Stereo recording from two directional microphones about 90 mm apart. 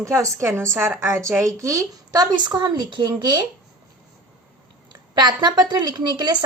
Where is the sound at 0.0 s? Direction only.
35° right (ahead or behind).